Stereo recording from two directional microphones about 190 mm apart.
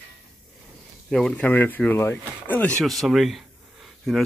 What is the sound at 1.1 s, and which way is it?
Speech, 5° left (ahead or behind).